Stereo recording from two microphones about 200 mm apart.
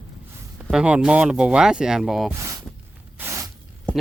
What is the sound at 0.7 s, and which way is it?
Speech, 5° right (ahead or behind).